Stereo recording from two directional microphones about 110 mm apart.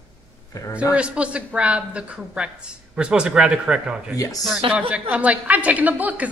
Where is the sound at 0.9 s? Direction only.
10° right (ahead or behind).